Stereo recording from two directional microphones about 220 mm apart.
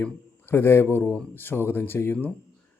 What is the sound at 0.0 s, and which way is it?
A man's voice, 10° left (ahead or behind).